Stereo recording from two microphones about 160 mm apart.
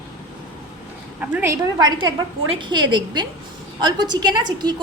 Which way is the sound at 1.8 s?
30° right (ahead or behind).